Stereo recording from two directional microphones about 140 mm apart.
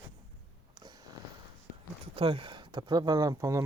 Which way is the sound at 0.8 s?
30° right (ahead or behind).